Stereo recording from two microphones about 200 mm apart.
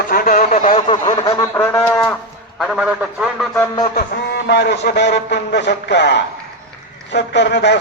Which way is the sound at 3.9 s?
55° left (ahead or behind).